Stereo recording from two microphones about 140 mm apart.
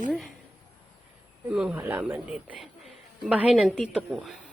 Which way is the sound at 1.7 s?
15° right (ahead or behind).